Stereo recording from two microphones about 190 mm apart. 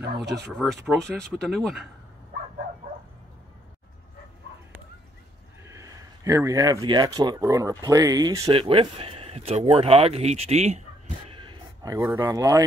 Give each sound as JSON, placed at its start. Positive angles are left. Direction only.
{"t": 0.0, "sound": "speech", "side_deg": -65}
{"t": 0.8, "sound": "speech", "side_deg": 0}
{"t": 5.6, "sound": "speech", "side_deg": -15}
{"t": 8.5, "sound": "speech", "side_deg": -30}
{"t": 11.2, "sound": "a sound", "side_deg": -25}
{"t": 12.2, "sound": "speech", "side_deg": -15}